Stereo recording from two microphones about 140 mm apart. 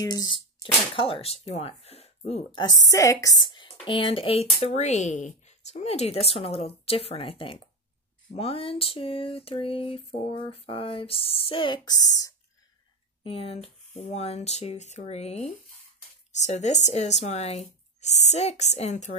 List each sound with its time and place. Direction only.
0.0 s speech: 30° left (ahead or behind); by 2.6 s 45° left (ahead or behind)
2.6 s speech: 25° left (ahead or behind)
8.4 s a sound: 40° left (ahead or behind); by 12.4 s 25° left (ahead or behind)
13.2 s speech: 45° left (ahead or behind)